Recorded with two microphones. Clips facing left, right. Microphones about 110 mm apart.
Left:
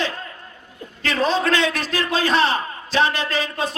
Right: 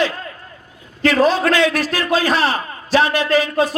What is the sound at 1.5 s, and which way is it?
A man's voice, 25° left (ahead or behind).